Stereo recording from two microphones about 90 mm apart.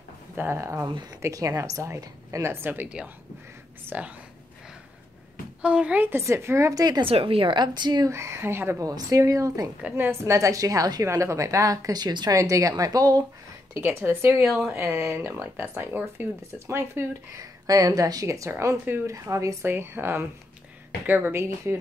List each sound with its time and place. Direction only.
0.4 s a woman's voice: 30° right (ahead or behind)
5.6 s speech: 15° right (ahead or behind); by 7.0 s 45° right (ahead or behind)
7.0 s speech: 90° right
7.5 s a woman's voice: 55° right (ahead or behind)
8.1 s speech: 30° right (ahead or behind)
8.8 s a woman's voice: 40° right (ahead or behind)
12.3 s a woman's voice: 35° right (ahead or behind)
13.7 s speech: 25° right (ahead or behind)
17.6 s a woman's voice: 40° right (ahead or behind)
19.6 s speech: 25° right (ahead or behind)